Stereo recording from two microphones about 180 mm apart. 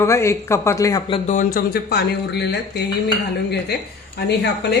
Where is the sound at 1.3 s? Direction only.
50° left (ahead or behind); by 3.9 s 65° left (ahead or behind).